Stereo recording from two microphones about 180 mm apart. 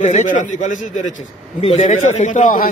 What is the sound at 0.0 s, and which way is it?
A man's voice, 40° left (ahead or behind).